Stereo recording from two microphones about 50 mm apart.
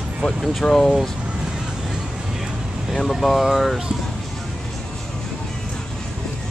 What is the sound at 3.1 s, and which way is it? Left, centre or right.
Speech, centre.